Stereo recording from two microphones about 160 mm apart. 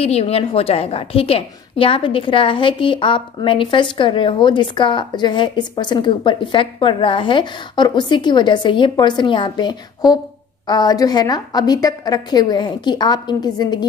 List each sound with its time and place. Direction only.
0.0 s a woman's voice: 40° left (ahead or behind)